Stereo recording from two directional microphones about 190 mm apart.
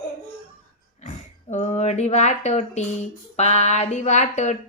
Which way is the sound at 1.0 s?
35° left (ahead or behind).